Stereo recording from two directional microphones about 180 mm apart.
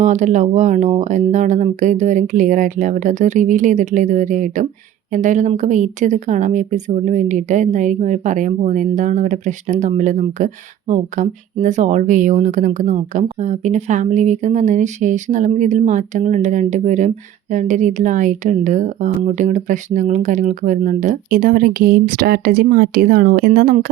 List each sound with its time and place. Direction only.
0.0 s a woman's voice: 40° right (ahead or behind)